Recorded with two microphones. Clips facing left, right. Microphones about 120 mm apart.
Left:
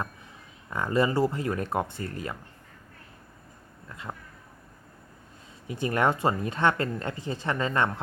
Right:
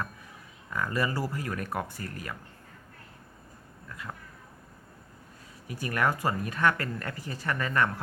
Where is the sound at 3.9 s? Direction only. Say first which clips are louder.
Left 2 dB; 25° left (ahead or behind).